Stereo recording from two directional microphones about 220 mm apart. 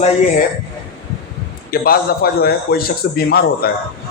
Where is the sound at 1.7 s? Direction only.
45° left (ahead or behind).